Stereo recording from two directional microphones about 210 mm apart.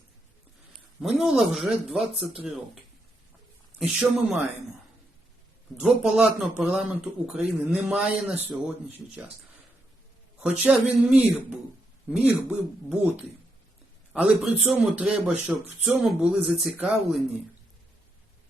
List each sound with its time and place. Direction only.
1.0 s a man's voice: centre (ahead or behind)
3.8 s a man's voice: centre (ahead or behind)
5.8 s a man's voice: 5° right (ahead or behind)
10.4 s a man's voice: 5° right (ahead or behind)
14.1 s a man's voice: 5° right (ahead or behind)